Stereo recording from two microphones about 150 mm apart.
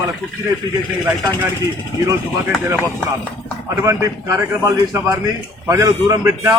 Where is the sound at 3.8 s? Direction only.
20° right (ahead or behind).